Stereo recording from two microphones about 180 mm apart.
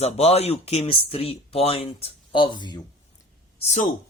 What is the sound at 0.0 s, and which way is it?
Speech, 35° left (ahead or behind).